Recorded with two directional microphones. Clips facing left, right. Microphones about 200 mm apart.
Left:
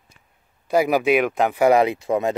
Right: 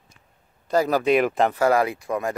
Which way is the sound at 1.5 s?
15° left (ahead or behind).